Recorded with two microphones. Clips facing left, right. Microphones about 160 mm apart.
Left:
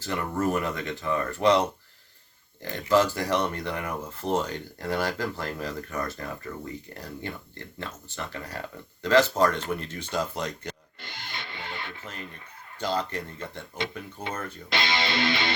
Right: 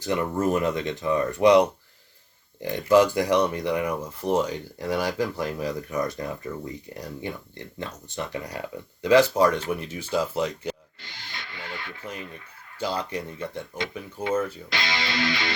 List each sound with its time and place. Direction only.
0.0 s speech: 15° right (ahead or behind)
11.0 s music: 55° left (ahead or behind)
11.3 s music: 25° left (ahead or behind)
12.8 s speech: 10° right (ahead or behind)
14.7 s music: 25° left (ahead or behind)